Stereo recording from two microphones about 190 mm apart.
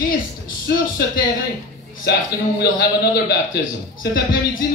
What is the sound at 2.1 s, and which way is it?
A man's voice, 60° left (ahead or behind).